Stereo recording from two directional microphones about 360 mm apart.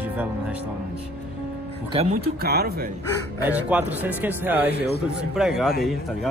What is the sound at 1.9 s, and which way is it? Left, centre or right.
Speech, centre.